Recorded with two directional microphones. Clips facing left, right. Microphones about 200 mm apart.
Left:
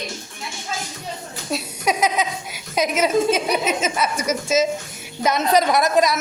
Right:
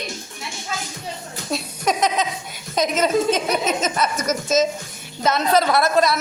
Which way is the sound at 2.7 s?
10° left (ahead or behind).